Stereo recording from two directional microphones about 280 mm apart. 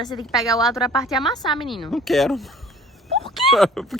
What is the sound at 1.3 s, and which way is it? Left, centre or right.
Speech, centre.